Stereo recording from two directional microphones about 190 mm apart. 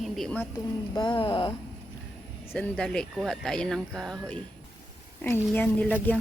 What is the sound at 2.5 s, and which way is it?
A woman's voice, 5° left (ahead or behind).